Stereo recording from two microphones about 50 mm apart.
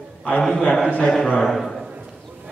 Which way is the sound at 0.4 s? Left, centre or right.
Centre.